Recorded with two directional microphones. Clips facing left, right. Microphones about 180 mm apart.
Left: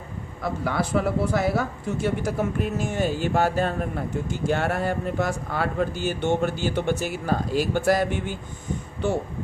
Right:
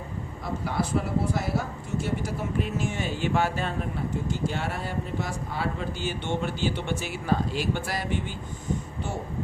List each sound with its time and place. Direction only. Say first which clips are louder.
0.6 s a man's voice: left 4 dB; 75° left (ahead or behind)
2.2 s speech: left 4 dB; 50° left (ahead or behind)